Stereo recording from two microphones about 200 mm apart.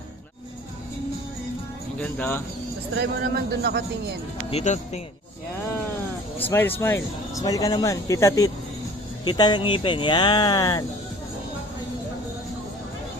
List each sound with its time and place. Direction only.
2.0 s speech: 10° left (ahead or behind)
3.0 s a man's voice: 55° right (ahead or behind)
4.5 s speech: 35° left (ahead or behind)
6.5 s speech: 10° left (ahead or behind)